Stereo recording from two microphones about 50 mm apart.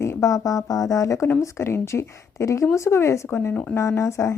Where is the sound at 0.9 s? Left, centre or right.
Left.